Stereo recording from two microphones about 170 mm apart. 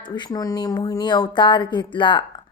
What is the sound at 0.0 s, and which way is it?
Speech, 25° left (ahead or behind).